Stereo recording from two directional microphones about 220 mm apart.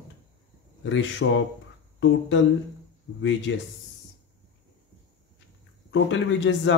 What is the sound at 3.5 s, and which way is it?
Speech, 55° left (ahead or behind).